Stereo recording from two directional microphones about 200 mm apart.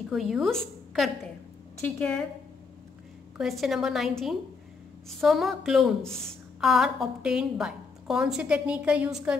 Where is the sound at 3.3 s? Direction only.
Centre (ahead or behind).